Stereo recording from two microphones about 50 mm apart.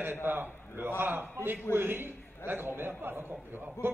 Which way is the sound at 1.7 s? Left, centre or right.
Right.